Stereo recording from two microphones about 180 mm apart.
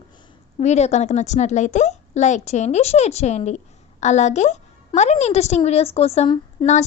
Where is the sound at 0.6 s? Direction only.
40° left (ahead or behind).